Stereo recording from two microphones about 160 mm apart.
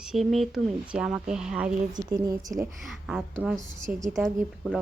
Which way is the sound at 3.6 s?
20° right (ahead or behind).